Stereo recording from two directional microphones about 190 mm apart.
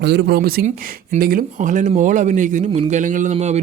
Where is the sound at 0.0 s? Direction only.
65° right (ahead or behind).